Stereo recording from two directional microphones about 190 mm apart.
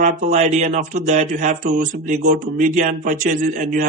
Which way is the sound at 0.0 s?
35° right (ahead or behind).